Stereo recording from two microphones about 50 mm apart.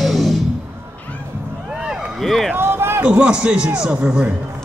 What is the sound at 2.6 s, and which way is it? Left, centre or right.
Run, right.